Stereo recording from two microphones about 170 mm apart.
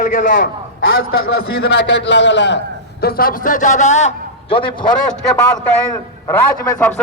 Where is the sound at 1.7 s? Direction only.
90° left.